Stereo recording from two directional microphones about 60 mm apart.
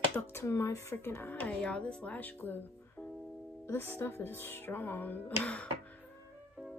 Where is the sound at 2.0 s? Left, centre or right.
Left.